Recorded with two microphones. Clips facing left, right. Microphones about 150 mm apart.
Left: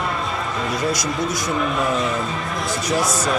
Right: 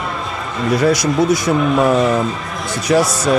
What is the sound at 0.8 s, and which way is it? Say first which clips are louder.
Speech: right 10 dB; 70° right (ahead or behind).